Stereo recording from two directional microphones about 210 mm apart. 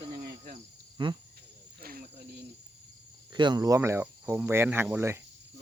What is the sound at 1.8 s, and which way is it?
Snake, 45° right (ahead or behind).